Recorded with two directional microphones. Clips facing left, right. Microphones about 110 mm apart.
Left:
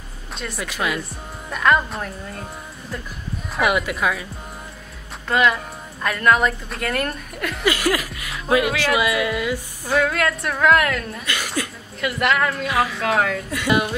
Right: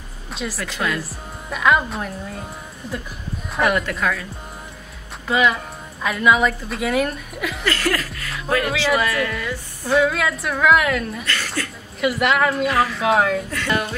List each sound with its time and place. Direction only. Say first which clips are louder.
0.3 s speech: right 2 dB; centre (ahead or behind)
0.7 s speech: left 1 dB; 10° left (ahead or behind)
1.5 s a woman's voice: even; 5° right (ahead or behind)
3.5 s a woman's voice: even; 5° left (ahead or behind)
5.3 s a woman's voice: even; centre (ahead or behind)
7.6 s speech: left 2 dB; 15° left (ahead or behind)
9.8 s a woman's voice: right 2 dB; centre (ahead or behind)
11.2 s speech: even; 15° left (ahead or behind)
12.0 s a woman's voice: right 2 dB; 5° right (ahead or behind)
13.5 s speech: left 3 dB; 15° left (ahead or behind)